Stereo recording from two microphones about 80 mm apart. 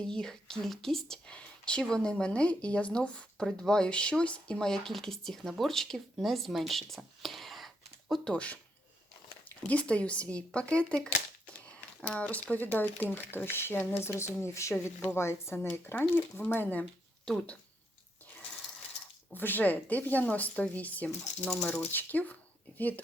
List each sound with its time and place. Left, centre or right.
0.0 s speech: centre
9.6 s a woman's voice: centre
14.2 s a woman's voice: left; by 17.6 s centre
19.3 s a woman's voice: left